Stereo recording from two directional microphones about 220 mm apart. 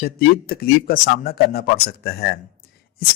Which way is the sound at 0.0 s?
40° left (ahead or behind).